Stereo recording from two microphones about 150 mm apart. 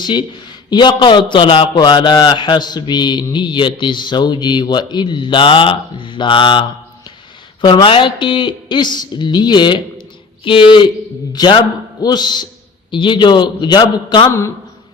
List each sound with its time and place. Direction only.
0.0 s a man's voice: 30° left (ahead or behind)